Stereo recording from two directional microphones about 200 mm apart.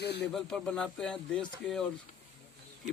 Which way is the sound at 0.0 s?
55° left (ahead or behind).